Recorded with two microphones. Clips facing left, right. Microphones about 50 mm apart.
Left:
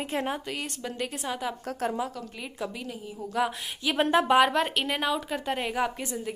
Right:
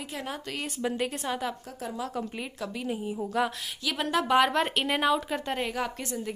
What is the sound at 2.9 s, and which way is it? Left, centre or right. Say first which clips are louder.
Speech: right 6 dB; centre.